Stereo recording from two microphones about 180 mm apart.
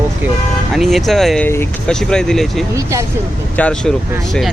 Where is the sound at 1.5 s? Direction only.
15° left (ahead or behind).